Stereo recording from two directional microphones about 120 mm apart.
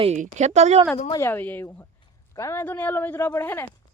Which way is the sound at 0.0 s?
70° right (ahead or behind).